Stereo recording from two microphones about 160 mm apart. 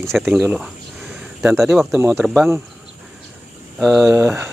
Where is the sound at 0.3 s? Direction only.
10° right (ahead or behind).